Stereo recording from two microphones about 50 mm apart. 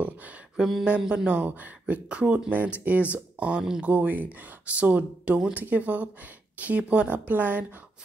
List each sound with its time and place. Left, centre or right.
0.8 s speech: right
1.4 s speech: right